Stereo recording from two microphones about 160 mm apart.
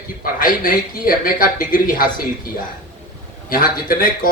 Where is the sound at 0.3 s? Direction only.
60° left (ahead or behind).